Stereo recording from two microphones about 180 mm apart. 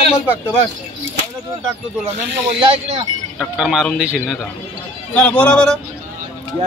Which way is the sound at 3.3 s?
Centre (ahead or behind).